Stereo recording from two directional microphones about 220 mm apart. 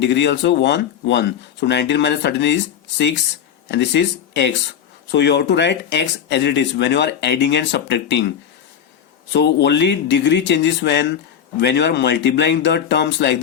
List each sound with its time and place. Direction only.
0.0 s speech: 50° left (ahead or behind)
9.3 s speech: 50° left (ahead or behind)